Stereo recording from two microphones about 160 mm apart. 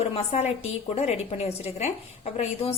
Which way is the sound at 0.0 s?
40° left (ahead or behind).